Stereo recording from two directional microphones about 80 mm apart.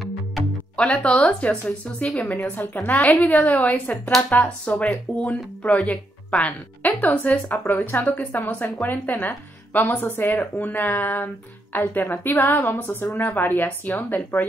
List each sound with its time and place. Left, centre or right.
0.7 s a woman's voice: centre